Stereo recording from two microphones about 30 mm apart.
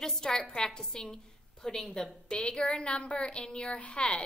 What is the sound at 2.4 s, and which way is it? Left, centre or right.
A woman's voice, left.